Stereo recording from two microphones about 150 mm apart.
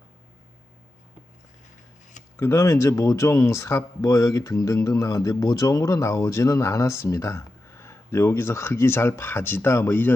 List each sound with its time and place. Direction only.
2.3 s speech: 20° left (ahead or behind)